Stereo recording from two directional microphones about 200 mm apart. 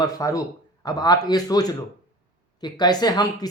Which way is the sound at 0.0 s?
15° left (ahead or behind).